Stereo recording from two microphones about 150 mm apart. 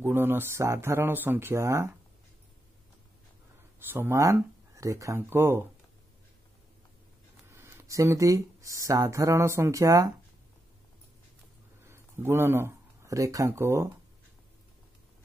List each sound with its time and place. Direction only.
0.0 s speech: 15° right (ahead or behind)
3.8 s speech: 15° right (ahead or behind)
7.4 s speech: 15° right (ahead or behind)
11.9 s speech: 15° right (ahead or behind)